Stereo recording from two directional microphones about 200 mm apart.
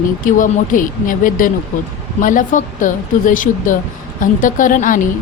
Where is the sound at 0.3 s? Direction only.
40° left (ahead or behind).